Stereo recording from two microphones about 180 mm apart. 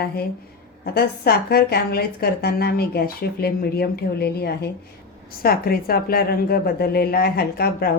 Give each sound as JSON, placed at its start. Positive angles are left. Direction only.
{"t": 0.9, "sound": "a woman's voice", "side_deg": 60}